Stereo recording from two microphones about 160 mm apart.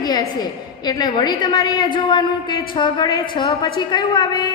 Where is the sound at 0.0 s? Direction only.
25° left (ahead or behind).